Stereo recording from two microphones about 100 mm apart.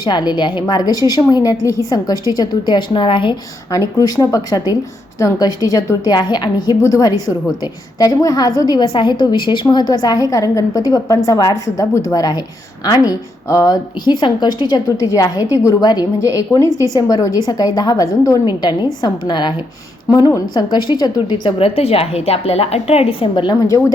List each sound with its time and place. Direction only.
0.0 s a woman's voice: 45° left (ahead or behind)
3.7 s a woman's voice: 35° left (ahead or behind)
6.1 s a woman's voice: 45° left (ahead or behind)
14.0 s a woman's voice: 50° left (ahead or behind)
21.6 s a woman's voice: 80° left; by 23.6 s 50° left (ahead or behind)
23.6 s a woman's voice: 35° left (ahead or behind)